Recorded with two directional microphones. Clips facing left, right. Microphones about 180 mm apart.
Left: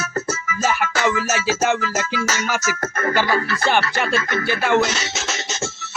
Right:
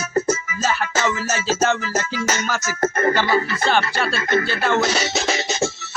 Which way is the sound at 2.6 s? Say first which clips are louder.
Right 4 dB; 40° right (ahead or behind).